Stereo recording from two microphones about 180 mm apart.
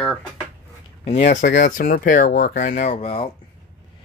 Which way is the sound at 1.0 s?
40° left (ahead or behind).